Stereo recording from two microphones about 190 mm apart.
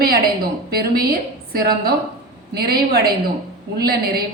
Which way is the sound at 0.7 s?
55° right (ahead or behind).